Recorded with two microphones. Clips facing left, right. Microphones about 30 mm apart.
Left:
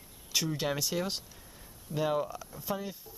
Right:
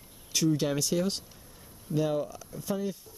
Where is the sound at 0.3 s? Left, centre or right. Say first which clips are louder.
Right 5 dB; centre.